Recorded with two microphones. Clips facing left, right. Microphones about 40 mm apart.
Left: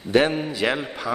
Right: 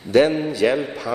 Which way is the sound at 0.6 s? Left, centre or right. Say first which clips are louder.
Right 5 dB; left.